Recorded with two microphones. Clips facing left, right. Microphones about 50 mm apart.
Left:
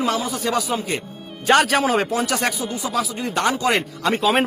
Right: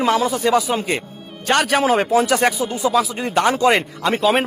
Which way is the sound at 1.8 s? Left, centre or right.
Centre.